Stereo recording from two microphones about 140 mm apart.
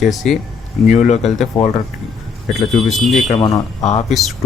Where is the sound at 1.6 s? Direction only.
10° left (ahead or behind).